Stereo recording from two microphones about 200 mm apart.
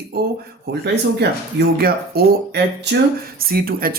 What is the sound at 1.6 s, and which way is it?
Speech, 55° right (ahead or behind).